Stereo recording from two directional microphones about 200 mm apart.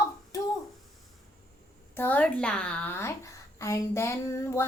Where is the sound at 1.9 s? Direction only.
10° left (ahead or behind).